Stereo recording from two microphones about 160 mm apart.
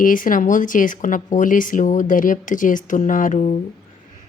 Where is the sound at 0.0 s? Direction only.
60° left (ahead or behind).